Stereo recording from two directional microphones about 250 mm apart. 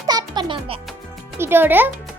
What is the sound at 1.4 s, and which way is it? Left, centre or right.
Speech, centre.